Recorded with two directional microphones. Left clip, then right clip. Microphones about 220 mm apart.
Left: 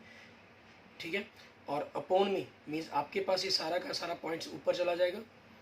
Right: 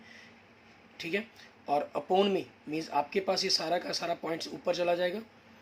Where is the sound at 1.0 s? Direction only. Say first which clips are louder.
Right 4 dB; 50° right (ahead or behind).